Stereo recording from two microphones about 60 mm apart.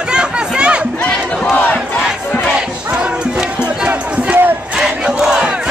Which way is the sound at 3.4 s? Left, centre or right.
Centre.